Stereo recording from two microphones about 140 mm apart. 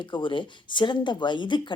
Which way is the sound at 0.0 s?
35° left (ahead or behind).